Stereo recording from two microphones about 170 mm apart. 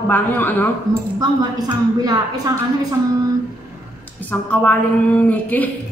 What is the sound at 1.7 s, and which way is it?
Speech, 25° right (ahead or behind).